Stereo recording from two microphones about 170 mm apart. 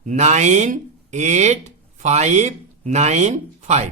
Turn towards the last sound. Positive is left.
turn(degrees=-45)  # may be behind; listen again after turning